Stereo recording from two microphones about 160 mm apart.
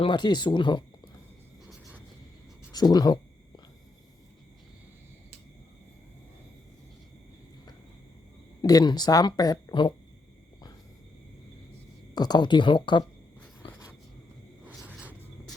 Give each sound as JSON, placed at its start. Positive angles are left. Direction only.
{"t": 0.0, "sound": "speech", "side_deg": 30}
{"t": 2.7, "sound": "speech", "side_deg": 25}
{"t": 8.6, "sound": "speech", "side_deg": 25}
{"t": 12.1, "sound": "speech", "side_deg": 25}
{"t": 14.8, "sound": "a sound", "side_deg": -5}